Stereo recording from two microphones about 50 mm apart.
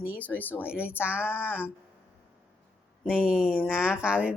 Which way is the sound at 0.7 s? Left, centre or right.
Right.